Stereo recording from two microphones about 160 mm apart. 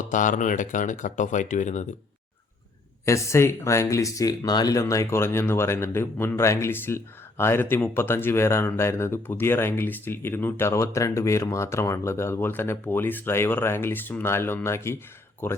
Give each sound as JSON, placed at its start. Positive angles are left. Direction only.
{"t": 0.0, "sound": "speech", "side_deg": 55}
{"t": 3.1, "sound": "speech", "side_deg": 20}